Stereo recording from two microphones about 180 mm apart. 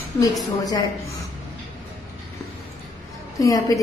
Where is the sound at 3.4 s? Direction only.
20° left (ahead or behind).